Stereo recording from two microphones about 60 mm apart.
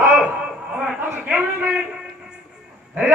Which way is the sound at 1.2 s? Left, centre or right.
Right.